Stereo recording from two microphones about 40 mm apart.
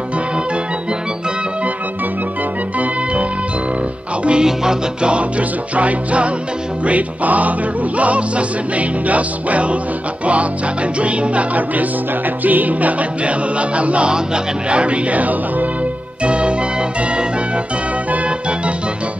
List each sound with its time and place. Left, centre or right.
4.2 s music: right
5.8 s music: right
11.0 s music: right
13.2 s music: right
14.1 s speech: right
16.3 s music: right